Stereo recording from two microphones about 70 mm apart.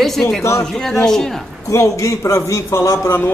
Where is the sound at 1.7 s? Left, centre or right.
Left.